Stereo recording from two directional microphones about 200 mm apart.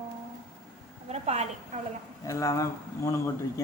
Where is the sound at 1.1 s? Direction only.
35° right (ahead or behind).